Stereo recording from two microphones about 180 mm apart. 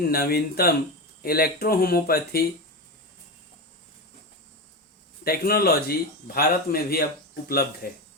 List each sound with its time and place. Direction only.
0.1 s speech: 55° left (ahead or behind)
5.2 s speech: 60° left (ahead or behind)